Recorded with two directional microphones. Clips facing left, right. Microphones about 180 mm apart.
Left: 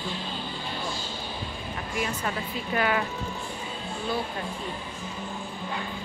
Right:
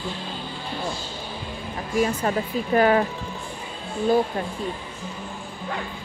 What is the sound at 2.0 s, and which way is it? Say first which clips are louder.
Speech: right 9 dB; 35° right (ahead or behind).